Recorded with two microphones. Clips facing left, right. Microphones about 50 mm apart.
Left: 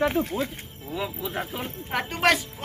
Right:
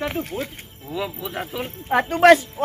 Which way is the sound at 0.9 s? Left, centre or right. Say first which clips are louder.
Right 3 dB; right.